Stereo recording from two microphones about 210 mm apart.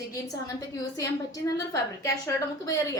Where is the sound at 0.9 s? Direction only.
15° left (ahead or behind).